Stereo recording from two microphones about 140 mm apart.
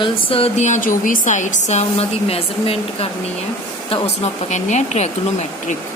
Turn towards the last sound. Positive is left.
turn(degrees=55)  # may be behind; listen again after turning